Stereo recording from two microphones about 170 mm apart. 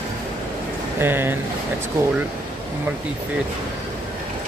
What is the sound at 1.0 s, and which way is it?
Speech, 10° right (ahead or behind).